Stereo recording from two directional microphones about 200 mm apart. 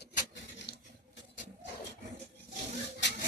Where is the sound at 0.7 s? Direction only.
55° left (ahead or behind).